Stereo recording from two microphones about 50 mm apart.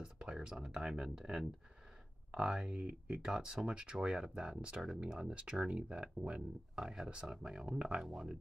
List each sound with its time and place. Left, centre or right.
0.0 s speech: centre